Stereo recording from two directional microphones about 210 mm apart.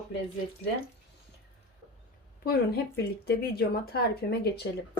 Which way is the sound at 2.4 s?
50° left (ahead or behind).